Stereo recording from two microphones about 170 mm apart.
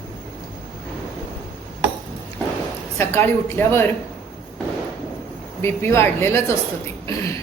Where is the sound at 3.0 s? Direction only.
15° left (ahead or behind).